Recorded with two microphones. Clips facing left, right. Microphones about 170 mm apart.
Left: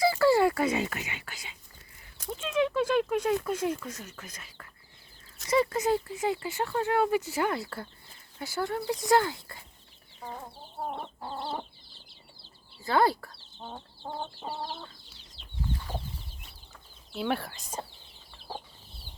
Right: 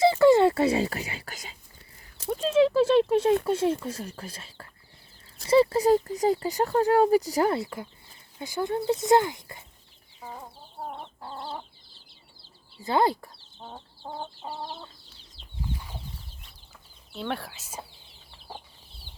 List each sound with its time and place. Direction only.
0.0 s speech: 20° right (ahead or behind); by 1.5 s 40° right (ahead or behind)
2.1 s speech: 30° right (ahead or behind)
7.6 s speech: 15° right (ahead or behind)
10.2 s chicken: 5° right (ahead or behind)
11.2 s chicken: 25° left (ahead or behind)
12.8 s speech: 20° right (ahead or behind)
13.6 s chicken: 5° right (ahead or behind)
17.2 s speech: 5° left (ahead or behind)